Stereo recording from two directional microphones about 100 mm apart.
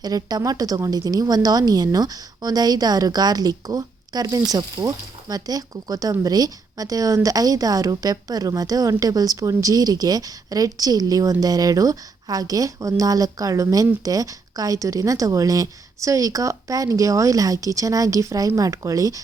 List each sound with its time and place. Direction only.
0.0 s a woman's voice: 40° right (ahead or behind)